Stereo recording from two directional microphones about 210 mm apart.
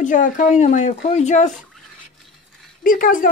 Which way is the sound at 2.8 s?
40° left (ahead or behind).